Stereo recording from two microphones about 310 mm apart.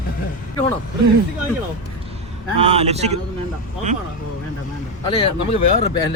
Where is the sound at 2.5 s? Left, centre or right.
Centre.